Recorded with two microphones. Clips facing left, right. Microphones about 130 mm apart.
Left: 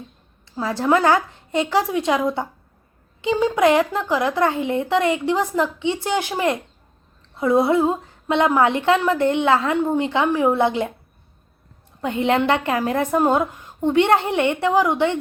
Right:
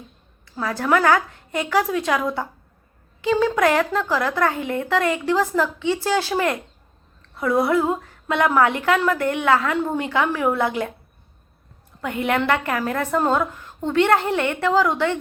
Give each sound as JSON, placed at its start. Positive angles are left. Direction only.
{"t": 0.4, "sound": "a woman's voice", "side_deg": 25}
{"t": 11.9, "sound": "a woman's voice", "side_deg": 25}